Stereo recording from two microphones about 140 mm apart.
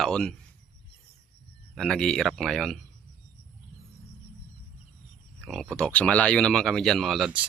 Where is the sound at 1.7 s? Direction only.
5° left (ahead or behind).